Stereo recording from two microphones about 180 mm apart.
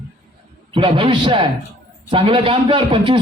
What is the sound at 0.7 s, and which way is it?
A man's voice, 30° right (ahead or behind).